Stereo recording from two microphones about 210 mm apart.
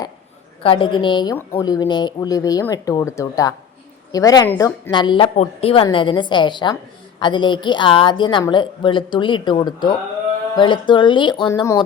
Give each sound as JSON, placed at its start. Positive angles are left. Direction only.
{"t": 0.6, "sound": "a woman's voice", "side_deg": 25}